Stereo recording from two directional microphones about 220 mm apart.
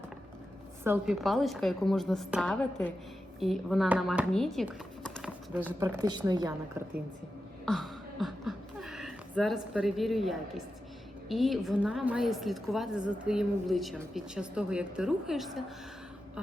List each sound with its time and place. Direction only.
0.9 s a woman's voice: centre (ahead or behind)
7.6 s a sound: centre (ahead or behind)
11.3 s a woman's voice: centre (ahead or behind)